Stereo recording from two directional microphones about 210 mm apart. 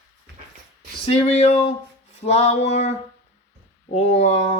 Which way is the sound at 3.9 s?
30° left (ahead or behind).